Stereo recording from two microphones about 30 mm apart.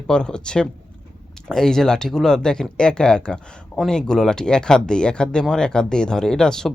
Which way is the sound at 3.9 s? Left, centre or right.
Left.